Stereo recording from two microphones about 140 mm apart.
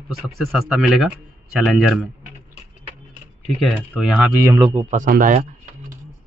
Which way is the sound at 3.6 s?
5° right (ahead or behind).